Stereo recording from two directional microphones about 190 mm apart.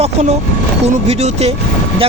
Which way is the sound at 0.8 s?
35° right (ahead or behind).